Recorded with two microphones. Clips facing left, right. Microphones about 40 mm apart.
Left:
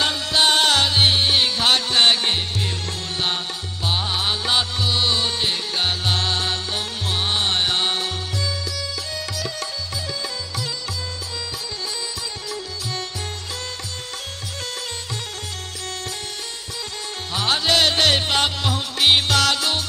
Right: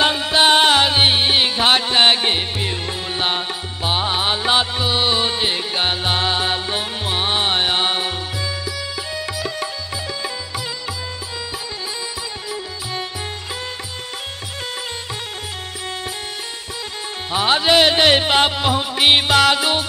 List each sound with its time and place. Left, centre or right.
0.0 s music: right
9.1 s sitar: centre
17.3 s music: right